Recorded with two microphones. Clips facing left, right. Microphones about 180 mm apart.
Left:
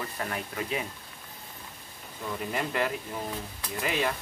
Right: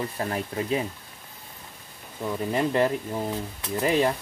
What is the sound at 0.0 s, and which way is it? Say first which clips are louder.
Speech: right 5 dB; 30° right (ahead or behind).